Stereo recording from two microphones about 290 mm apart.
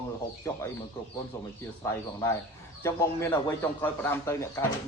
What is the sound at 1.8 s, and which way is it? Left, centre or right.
A man's voice, centre.